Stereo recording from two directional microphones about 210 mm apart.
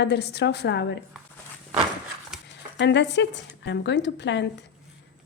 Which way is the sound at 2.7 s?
55° left (ahead or behind).